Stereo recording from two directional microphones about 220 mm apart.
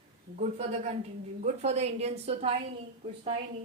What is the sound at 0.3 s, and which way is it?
A woman's voice, 30° right (ahead or behind).